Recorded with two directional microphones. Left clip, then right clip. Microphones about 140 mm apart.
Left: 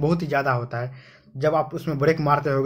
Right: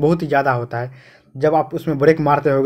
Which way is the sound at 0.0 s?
30° right (ahead or behind).